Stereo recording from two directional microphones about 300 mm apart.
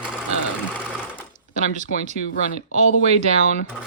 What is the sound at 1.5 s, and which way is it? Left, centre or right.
Speech, right.